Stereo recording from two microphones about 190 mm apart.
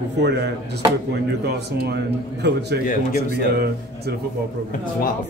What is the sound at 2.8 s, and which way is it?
Speech, 45° left (ahead or behind).